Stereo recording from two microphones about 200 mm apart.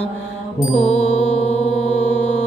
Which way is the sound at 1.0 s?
35° left (ahead or behind).